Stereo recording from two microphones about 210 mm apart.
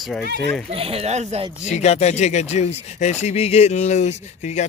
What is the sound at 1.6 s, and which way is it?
Speech, 35° left (ahead or behind).